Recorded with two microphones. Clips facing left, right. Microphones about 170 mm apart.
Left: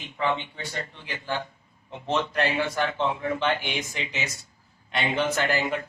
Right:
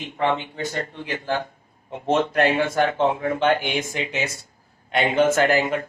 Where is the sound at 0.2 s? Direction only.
40° right (ahead or behind).